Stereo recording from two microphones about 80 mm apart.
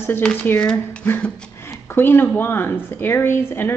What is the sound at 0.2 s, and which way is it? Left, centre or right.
Speech, centre.